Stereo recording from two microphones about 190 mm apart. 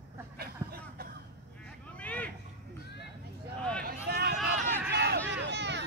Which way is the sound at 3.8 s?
55° right (ahead or behind).